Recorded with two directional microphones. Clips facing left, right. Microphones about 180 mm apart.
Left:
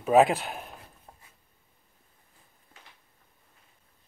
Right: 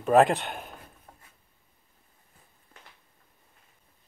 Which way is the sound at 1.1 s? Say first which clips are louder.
Even; 25° left (ahead or behind).